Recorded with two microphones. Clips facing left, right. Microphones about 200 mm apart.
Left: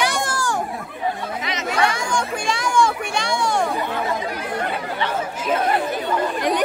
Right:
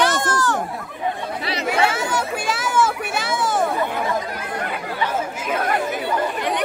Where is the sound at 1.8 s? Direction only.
5° right (ahead or behind).